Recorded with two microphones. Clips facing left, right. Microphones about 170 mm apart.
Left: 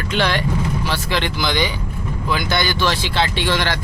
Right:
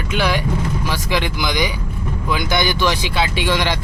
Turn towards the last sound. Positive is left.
turn(degrees=-15)  # may be behind; listen again after turning